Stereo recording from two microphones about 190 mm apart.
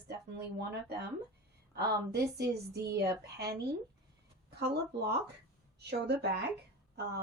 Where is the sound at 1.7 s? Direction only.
60° right (ahead or behind).